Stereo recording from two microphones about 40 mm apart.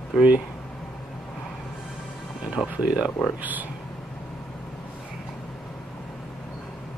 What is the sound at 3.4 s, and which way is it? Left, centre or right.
Speech, right.